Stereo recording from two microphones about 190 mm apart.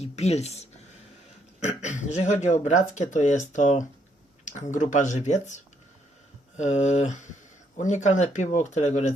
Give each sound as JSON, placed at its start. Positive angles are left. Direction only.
{"t": 0.0, "sound": "speech", "side_deg": 35}
{"t": 6.6, "sound": "speech", "side_deg": 35}